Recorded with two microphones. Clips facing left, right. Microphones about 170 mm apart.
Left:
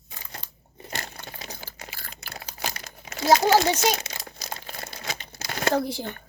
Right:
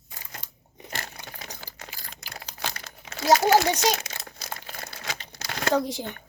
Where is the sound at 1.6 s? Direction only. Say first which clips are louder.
Left 2 dB; 10° left (ahead or behind).